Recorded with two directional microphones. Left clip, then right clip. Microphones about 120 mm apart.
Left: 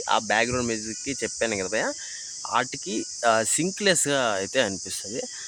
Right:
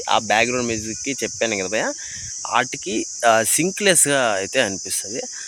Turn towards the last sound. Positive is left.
turn(degrees=-20)  # may be behind; listen again after turning